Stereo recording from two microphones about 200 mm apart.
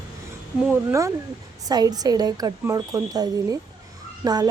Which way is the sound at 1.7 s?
20° right (ahead or behind).